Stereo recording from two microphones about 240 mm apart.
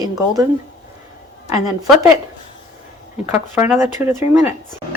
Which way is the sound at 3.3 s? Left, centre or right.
Centre.